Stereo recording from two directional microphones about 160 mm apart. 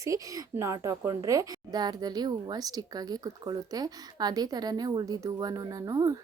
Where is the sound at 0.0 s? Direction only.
20° right (ahead or behind).